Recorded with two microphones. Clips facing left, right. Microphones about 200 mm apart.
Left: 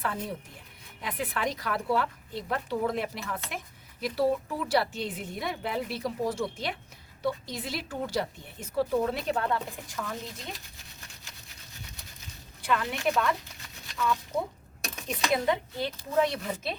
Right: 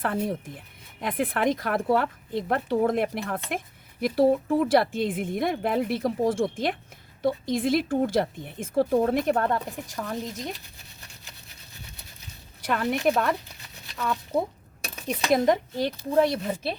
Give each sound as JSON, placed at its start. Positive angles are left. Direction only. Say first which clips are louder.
{"t": 0.0, "sound": "speech", "louder": "right 6 dB", "side_deg": -50}
{"t": 12.6, "sound": "speech", "louder": "right 4 dB", "side_deg": -50}
{"t": 13.9, "sound": "speech", "louder": "right 3 dB", "side_deg": -35}
{"t": 16.4, "sound": "speech", "louder": "right 4 dB", "side_deg": -30}